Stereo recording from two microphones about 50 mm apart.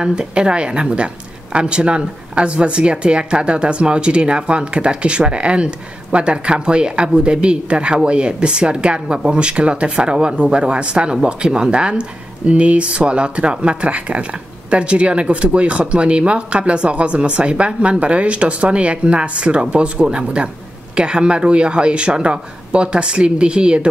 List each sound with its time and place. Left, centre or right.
0.0 s speech: centre